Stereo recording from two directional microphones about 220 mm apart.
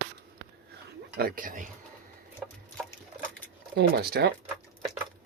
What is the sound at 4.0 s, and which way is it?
Speech, 45° right (ahead or behind).